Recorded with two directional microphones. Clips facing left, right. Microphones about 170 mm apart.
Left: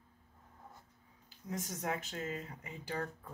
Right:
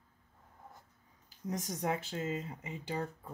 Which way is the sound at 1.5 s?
35° right (ahead or behind).